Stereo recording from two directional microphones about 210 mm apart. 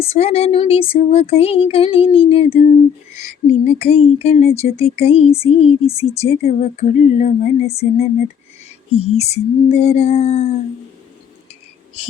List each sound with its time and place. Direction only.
0.0 s speech: 30° left (ahead or behind)